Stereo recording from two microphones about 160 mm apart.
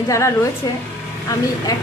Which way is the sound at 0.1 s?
20° left (ahead or behind).